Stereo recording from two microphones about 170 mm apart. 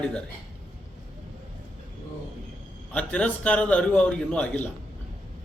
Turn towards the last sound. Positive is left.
turn(degrees=10)  # may be behind; listen again after turning